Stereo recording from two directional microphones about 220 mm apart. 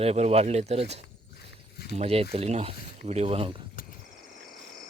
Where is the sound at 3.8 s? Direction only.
40° left (ahead or behind).